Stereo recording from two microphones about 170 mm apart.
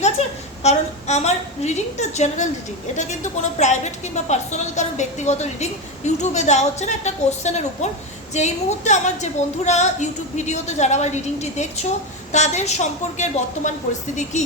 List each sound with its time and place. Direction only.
0.0 s a woman's voice: 40° left (ahead or behind)